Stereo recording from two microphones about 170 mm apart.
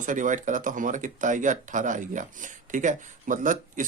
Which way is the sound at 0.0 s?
50° right (ahead or behind).